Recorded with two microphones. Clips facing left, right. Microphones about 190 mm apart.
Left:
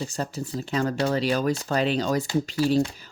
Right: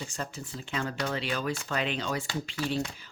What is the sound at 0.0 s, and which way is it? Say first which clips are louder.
Speech: left 7 dB; 35° left (ahead or behind).